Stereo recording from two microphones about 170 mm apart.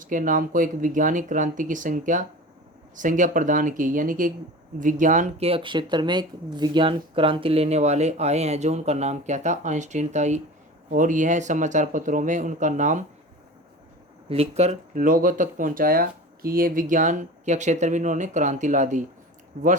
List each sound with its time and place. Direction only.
0.0 s speech: 50° right (ahead or behind)
5.5 s speech: 30° right (ahead or behind); by 13.1 s 45° right (ahead or behind)
14.3 s speech: 40° right (ahead or behind)